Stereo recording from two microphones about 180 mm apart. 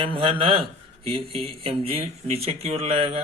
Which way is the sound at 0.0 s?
30° right (ahead or behind).